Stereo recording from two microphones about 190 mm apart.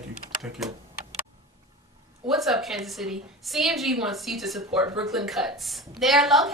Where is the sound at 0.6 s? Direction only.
Centre (ahead or behind).